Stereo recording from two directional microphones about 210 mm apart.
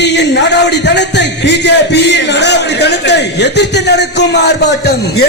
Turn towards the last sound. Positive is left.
turn(degrees=50)  # may be behind; listen again after turning